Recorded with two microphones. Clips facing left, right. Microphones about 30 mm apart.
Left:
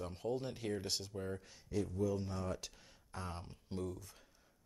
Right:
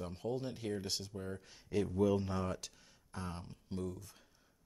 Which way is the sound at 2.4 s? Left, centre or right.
Centre.